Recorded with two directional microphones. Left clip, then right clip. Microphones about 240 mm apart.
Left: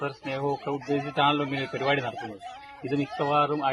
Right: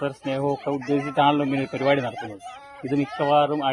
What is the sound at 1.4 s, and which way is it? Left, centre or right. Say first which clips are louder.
Speech: right 5 dB; centre.